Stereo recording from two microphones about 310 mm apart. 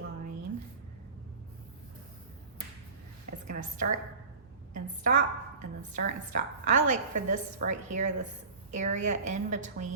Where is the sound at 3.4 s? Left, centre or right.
Right.